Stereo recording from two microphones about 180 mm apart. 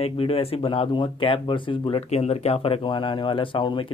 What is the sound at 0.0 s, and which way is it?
Speech, 35° left (ahead or behind).